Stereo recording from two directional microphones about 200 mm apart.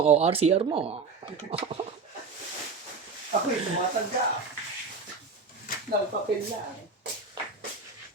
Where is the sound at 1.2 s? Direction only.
25° right (ahead or behind).